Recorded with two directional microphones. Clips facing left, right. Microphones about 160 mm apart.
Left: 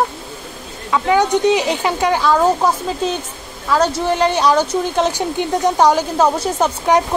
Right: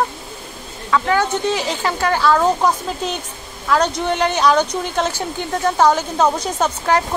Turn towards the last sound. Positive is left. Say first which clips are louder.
# left 3 dB
turn(degrees=15)  # may be behind; listen again after turning